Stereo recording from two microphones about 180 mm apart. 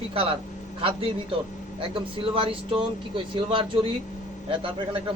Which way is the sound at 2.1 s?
30° right (ahead or behind).